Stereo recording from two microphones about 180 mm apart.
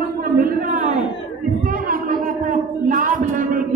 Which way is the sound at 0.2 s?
50° right (ahead or behind).